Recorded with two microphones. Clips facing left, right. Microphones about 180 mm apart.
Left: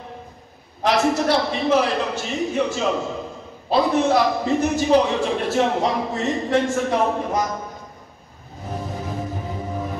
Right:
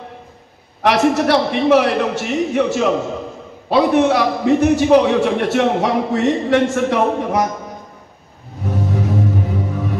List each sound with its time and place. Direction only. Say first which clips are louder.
0.8 s a man's voice: right 4 dB; 65° right (ahead or behind)
8.6 s music: right 8 dB; 70° right (ahead or behind)